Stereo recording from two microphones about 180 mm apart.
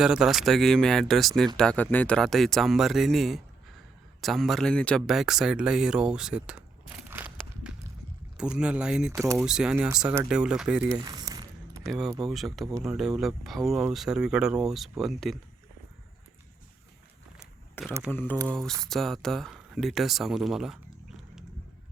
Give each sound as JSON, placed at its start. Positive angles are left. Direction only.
{"t": 0.0, "sound": "speech", "side_deg": -5}
{"t": 7.1, "sound": "walk", "side_deg": -10}
{"t": 8.4, "sound": "speech", "side_deg": -5}
{"t": 10.9, "sound": "a sound", "side_deg": -20}
{"t": 11.9, "sound": "speech", "side_deg": 0}
{"t": 17.8, "sound": "speech", "side_deg": 10}